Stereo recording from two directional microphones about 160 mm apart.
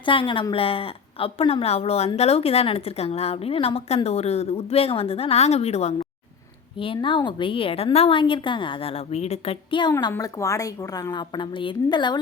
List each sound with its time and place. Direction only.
0.0 s a woman's voice: 30° left (ahead or behind)
9.1 s a woman's voice: 40° left (ahead or behind)
9.9 s a woman's voice: 20° left (ahead or behind)